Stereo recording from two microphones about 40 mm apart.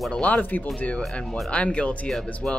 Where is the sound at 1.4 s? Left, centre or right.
Left.